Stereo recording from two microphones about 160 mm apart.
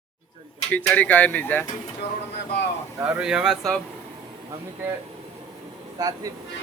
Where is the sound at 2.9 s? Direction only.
10° right (ahead or behind).